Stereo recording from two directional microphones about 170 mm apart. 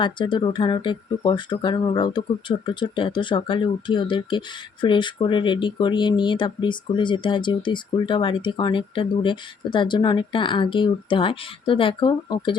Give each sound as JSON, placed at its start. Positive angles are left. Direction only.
{"t": 0.0, "sound": "speech", "side_deg": 25}